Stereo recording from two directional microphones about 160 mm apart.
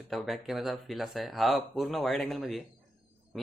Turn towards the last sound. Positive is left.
turn(degrees=0)  # may be behind; listen again after turning